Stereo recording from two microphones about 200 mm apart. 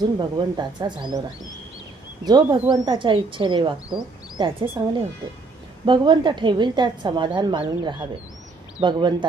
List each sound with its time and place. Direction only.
0.2 s speech: 20° right (ahead or behind)
2.2 s speech: 20° right (ahead or behind)